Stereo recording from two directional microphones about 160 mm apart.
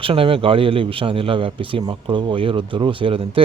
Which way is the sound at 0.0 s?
35° right (ahead or behind).